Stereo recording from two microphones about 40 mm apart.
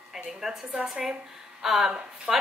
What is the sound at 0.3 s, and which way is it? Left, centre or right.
Speech, centre.